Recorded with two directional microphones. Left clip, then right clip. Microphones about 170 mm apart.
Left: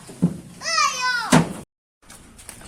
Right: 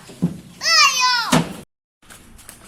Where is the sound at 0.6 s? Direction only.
60° left (ahead or behind).